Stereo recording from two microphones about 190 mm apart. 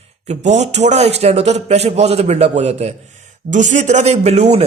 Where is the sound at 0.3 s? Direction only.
35° right (ahead or behind).